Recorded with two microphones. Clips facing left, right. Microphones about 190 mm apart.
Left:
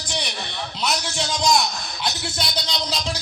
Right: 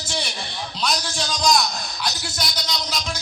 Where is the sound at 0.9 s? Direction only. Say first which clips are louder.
Left 1 dB; 20° left (ahead or behind).